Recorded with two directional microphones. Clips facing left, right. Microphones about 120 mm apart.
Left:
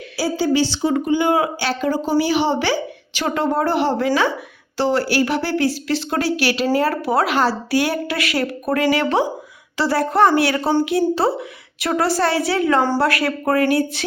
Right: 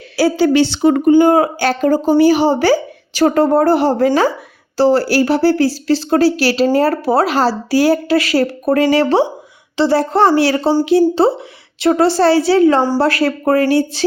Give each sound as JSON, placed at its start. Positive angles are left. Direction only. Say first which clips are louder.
{"t": 0.2, "sound": "a woman's voice", "louder": "right 6 dB", "side_deg": -70}